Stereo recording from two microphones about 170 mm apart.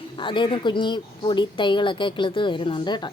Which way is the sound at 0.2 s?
30° left (ahead or behind).